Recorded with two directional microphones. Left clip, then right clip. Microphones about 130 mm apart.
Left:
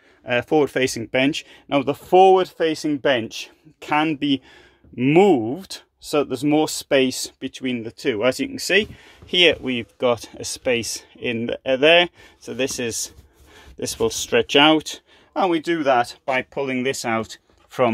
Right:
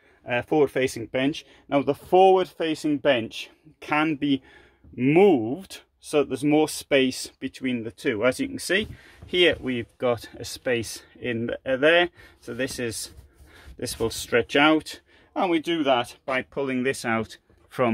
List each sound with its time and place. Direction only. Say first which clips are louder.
0.2 s speech: left 3 dB; 35° left (ahead or behind); by 1.6 s 50° left (ahead or behind)
1.7 s speech: left 3 dB; 30° left (ahead or behind)
15.3 s speech: left 4 dB; 20° left (ahead or behind)